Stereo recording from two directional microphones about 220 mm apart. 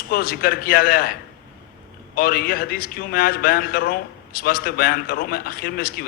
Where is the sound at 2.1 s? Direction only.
45° left (ahead or behind).